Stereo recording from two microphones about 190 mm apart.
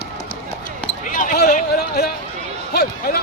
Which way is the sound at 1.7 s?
55° left (ahead or behind).